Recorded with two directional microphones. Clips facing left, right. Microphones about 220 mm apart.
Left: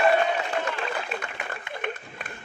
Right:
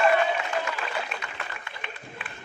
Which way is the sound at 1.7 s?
50° left (ahead or behind).